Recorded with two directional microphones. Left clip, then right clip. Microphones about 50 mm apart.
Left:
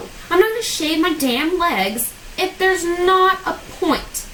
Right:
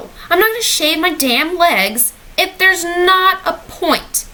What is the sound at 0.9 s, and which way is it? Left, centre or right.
A woman's voice, right.